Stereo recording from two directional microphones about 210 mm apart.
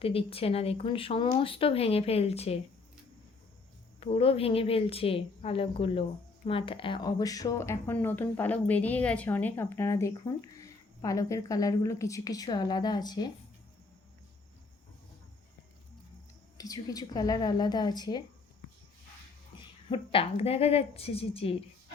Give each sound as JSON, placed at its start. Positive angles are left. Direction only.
{"t": 0.0, "sound": "speech", "side_deg": 25}
{"t": 4.0, "sound": "a woman's voice", "side_deg": 25}
{"t": 16.6, "sound": "speech", "side_deg": 15}
{"t": 19.5, "sound": "speech", "side_deg": 25}